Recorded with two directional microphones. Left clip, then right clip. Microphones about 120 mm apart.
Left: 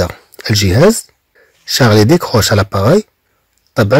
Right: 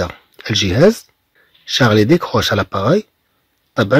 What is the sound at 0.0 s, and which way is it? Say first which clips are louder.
Speech: left 5 dB; 25° left (ahead or behind).